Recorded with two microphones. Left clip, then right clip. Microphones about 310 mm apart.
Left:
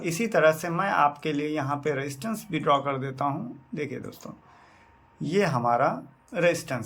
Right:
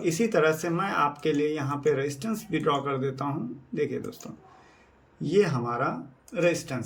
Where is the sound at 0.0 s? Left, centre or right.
Centre.